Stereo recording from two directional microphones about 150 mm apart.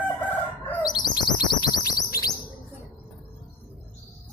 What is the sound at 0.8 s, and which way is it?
Bird, 25° left (ahead or behind).